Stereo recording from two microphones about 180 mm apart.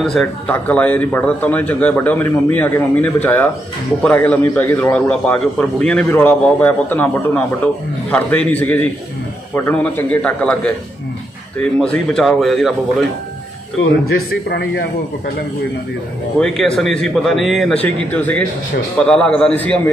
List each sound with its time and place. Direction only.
0.0 s a man's voice: 5° left (ahead or behind)
11.8 s speech: 5° left (ahead or behind)
14.5 s a man's voice: 60° left (ahead or behind)
16.3 s a man's voice: 5° left (ahead or behind)